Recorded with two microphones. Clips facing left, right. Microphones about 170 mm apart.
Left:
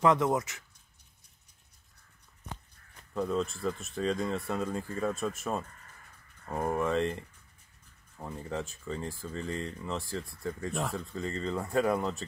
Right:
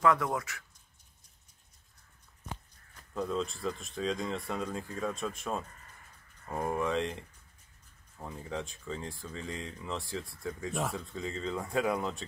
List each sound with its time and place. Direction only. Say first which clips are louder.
0.0 s speech: left 3 dB; 20° left (ahead or behind)
3.2 s speech: left 3 dB; 5° left (ahead or behind)